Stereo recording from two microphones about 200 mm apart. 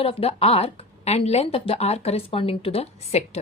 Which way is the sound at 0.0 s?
30° left (ahead or behind).